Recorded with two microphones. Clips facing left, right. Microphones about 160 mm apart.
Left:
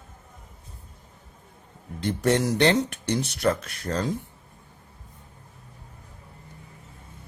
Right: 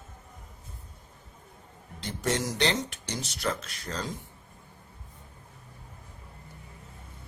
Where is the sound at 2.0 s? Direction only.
55° left (ahead or behind).